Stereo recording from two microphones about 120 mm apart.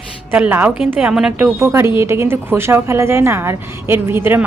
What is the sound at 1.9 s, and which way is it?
A woman's voice, 20° right (ahead or behind).